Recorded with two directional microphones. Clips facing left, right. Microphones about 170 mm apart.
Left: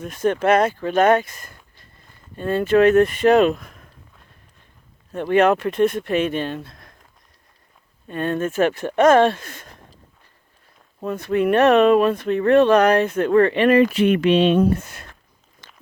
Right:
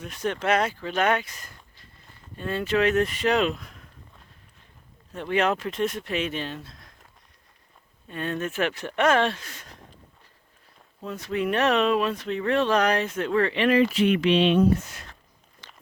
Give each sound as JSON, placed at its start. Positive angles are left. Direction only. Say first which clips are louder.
{"t": 0.0, "sound": "speech", "louder": "left 8 dB", "side_deg": 50}
{"t": 5.2, "sound": "speech", "louder": "left 8 dB", "side_deg": 55}
{"t": 8.0, "sound": "speech", "louder": "left 7 dB", "side_deg": 50}
{"t": 11.0, "sound": "speech", "louder": "left 8 dB", "side_deg": 55}
{"t": 15.6, "sound": "a sound", "louder": "left 1 dB", "side_deg": 45}